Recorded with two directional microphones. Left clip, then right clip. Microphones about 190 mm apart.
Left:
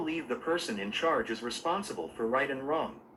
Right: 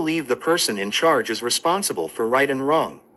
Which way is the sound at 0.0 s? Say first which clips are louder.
Right 11 dB; 60° right (ahead or behind).